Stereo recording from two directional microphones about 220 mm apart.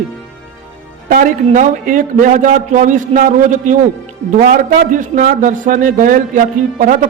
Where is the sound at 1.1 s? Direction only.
35° right (ahead or behind).